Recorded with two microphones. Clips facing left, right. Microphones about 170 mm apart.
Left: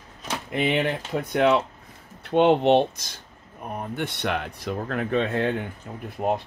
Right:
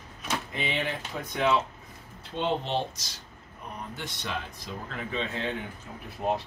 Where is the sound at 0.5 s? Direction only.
60° left (ahead or behind).